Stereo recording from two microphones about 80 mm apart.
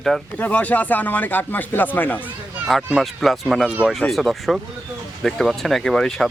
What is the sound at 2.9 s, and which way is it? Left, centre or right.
Speech, centre.